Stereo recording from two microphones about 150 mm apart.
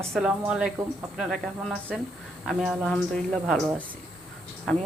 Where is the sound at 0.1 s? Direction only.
5° right (ahead or behind).